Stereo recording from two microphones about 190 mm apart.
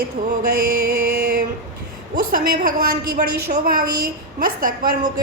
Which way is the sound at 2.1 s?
50° right (ahead or behind).